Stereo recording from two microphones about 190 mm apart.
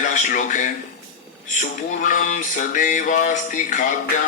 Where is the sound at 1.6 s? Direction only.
45° left (ahead or behind).